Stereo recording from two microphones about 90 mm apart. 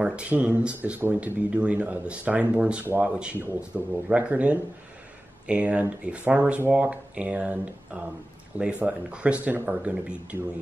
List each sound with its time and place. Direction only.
0.0 s speech: 10° right (ahead or behind)